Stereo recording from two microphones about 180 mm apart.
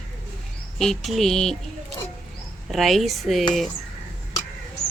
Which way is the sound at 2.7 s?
Centre (ahead or behind).